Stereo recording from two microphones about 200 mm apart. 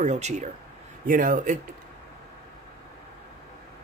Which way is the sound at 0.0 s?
35° right (ahead or behind).